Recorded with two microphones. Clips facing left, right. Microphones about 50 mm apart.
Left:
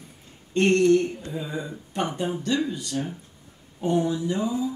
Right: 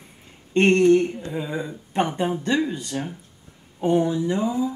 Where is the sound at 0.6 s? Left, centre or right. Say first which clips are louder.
Right 3 dB; right.